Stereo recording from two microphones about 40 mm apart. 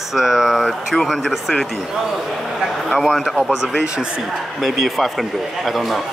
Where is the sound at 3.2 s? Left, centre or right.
Centre.